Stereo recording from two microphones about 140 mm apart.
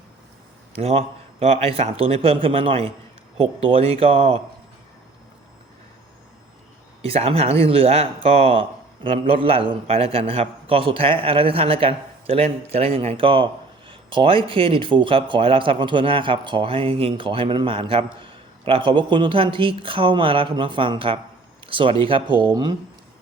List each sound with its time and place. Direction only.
0.8 s a man's voice: 45° right (ahead or behind)
7.0 s a man's voice: 45° right (ahead or behind)